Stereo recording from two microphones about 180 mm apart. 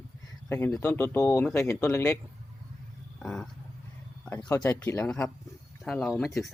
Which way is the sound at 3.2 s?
5° left (ahead or behind).